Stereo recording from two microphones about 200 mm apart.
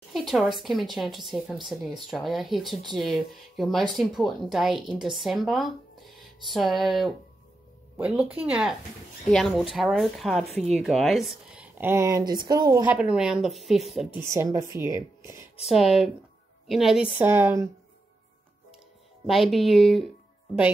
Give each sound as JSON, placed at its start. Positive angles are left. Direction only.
{"t": 0.1, "sound": "speech", "side_deg": 0}
{"t": 8.4, "sound": "speech", "side_deg": -5}
{"t": 12.9, "sound": "speech", "side_deg": -5}
{"t": 14.2, "sound": "speech", "side_deg": -15}
{"t": 15.7, "sound": "speech", "side_deg": 0}
{"t": 19.2, "sound": "speech", "side_deg": 0}